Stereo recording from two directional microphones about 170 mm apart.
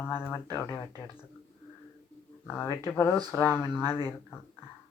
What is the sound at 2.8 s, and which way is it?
Speech, 15° left (ahead or behind).